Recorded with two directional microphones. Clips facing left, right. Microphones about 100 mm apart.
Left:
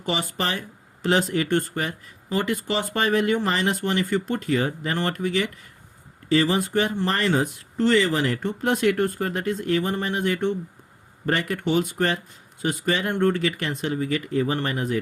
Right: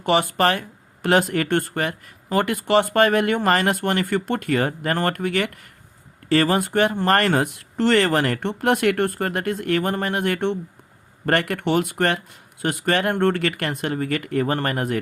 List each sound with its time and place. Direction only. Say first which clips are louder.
0.0 s speech: right 8 dB; 55° right (ahead or behind)